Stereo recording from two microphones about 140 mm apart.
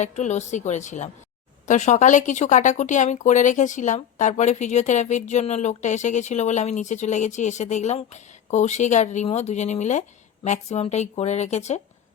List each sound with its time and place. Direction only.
0.0 s speech: 55° left (ahead or behind)